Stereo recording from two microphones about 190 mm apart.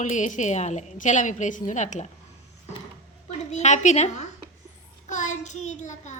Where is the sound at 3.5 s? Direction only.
35° left (ahead or behind).